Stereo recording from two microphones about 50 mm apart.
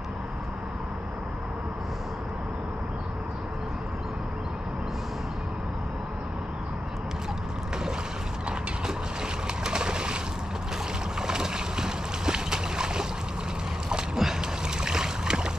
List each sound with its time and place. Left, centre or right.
9.6 s bird: centre
11.1 s boat: centre
13.8 s a sound: centre
14.8 s boat: centre